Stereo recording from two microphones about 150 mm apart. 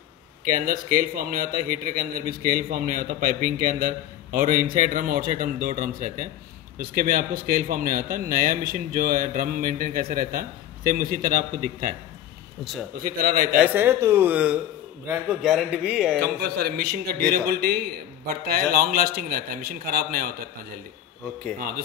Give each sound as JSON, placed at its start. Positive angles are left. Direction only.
{"t": 0.5, "sound": "a man's voice", "side_deg": -70}
{"t": 12.9, "sound": "a man's voice", "side_deg": -75}
{"t": 13.6, "sound": "a man's voice", "side_deg": -15}
{"t": 16.3, "sound": "a man's voice", "side_deg": -90}